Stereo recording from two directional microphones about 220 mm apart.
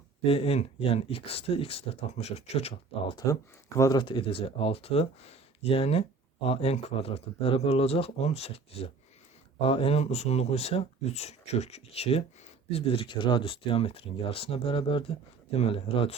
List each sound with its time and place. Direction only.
0.3 s speech: 25° left (ahead or behind)